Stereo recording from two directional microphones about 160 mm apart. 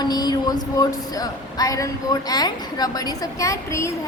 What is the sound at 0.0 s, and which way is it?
A woman's voice, 25° left (ahead or behind).